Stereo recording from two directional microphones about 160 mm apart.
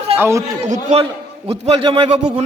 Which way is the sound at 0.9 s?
45° right (ahead or behind).